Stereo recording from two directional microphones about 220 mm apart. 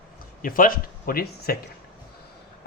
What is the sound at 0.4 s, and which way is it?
Speech, 40° left (ahead or behind).